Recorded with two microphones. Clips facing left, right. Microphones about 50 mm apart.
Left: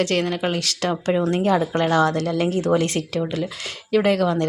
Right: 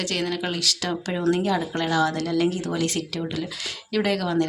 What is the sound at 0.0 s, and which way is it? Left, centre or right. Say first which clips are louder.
Speech: left 5 dB; left.